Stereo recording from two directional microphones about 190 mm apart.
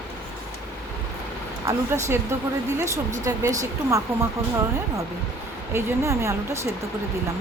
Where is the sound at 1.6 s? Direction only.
15° right (ahead or behind).